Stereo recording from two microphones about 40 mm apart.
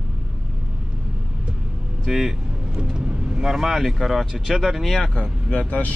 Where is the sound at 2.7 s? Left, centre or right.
Right.